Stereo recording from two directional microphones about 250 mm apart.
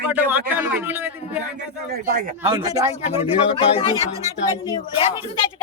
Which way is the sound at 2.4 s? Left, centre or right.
Centre.